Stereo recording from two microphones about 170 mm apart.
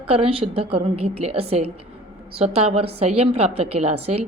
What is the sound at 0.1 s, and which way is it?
A woman's voice, 35° right (ahead or behind).